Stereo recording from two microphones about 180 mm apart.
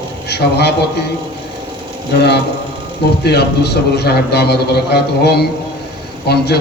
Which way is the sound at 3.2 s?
65° left (ahead or behind).